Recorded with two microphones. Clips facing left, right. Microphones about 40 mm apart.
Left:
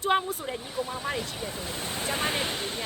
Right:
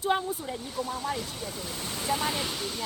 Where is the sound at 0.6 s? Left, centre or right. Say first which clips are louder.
Even; left.